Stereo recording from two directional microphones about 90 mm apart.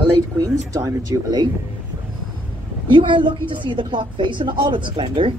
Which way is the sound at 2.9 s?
65° right (ahead or behind).